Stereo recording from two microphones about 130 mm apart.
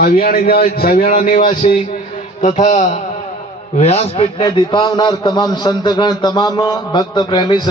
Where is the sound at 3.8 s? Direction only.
55° left (ahead or behind).